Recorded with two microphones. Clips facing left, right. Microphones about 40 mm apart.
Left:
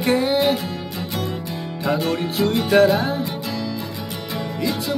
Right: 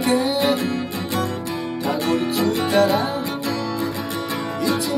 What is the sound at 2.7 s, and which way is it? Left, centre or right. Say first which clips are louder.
Music: left 3 dB; left.